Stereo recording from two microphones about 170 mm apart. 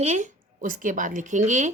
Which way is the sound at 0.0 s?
45° right (ahead or behind).